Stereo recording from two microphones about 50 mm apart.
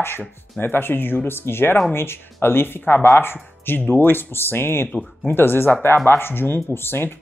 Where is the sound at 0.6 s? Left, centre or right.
Left.